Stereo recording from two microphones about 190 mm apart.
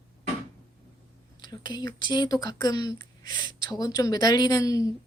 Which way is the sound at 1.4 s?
20° left (ahead or behind).